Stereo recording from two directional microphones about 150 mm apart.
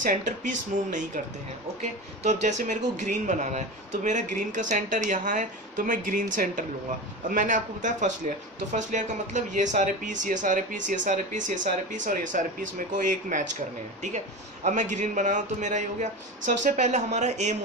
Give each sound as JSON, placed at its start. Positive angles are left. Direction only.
{"t": 0.0, "sound": "a man's voice", "side_deg": -60}